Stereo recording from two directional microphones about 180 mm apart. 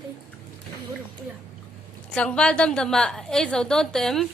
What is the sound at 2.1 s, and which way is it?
Speech, 5° left (ahead or behind).